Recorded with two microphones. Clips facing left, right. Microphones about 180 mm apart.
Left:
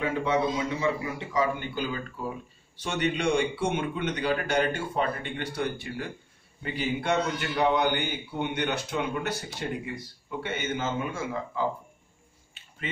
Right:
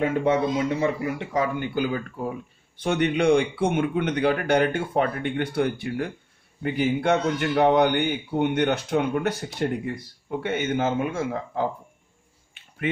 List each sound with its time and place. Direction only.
0.0 s a man's voice: 50° right (ahead or behind)